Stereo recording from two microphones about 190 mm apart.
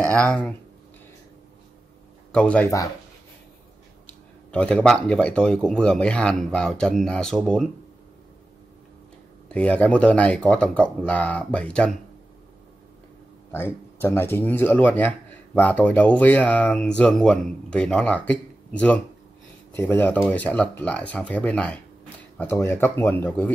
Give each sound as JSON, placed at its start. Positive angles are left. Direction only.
{"t": 0.1, "sound": "speech", "side_deg": 5}
{"t": 2.3, "sound": "a man's voice", "side_deg": 5}
{"t": 4.5, "sound": "speech", "side_deg": 5}
{"t": 9.5, "sound": "a man's voice", "side_deg": 5}
{"t": 13.9, "sound": "a man's voice", "side_deg": 10}